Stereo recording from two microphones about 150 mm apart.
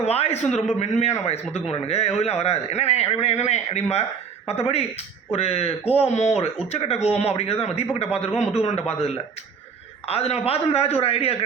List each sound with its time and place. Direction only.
0.0 s a man's voice: 45° left (ahead or behind)